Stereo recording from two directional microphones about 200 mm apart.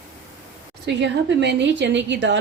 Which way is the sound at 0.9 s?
60° right (ahead or behind).